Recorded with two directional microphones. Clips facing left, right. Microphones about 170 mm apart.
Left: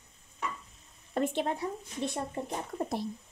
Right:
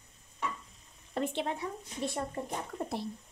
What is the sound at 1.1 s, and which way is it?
Speech, 45° left (ahead or behind).